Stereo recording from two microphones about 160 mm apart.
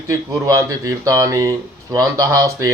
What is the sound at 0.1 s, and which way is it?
Speech, 20° right (ahead or behind).